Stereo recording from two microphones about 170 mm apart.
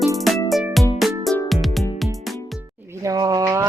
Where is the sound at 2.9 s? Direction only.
20° right (ahead or behind).